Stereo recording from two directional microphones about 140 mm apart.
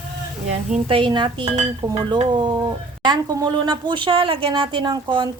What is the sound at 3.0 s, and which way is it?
Speech, 30° right (ahead or behind).